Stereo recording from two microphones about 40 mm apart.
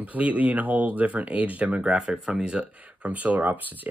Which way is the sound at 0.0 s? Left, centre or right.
Right.